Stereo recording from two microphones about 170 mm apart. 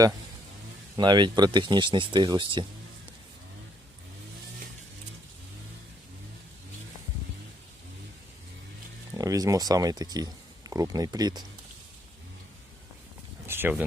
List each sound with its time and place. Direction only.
0.9 s speech: 25° right (ahead or behind)
9.1 s speech: 20° right (ahead or behind)
13.5 s speech: 10° right (ahead or behind)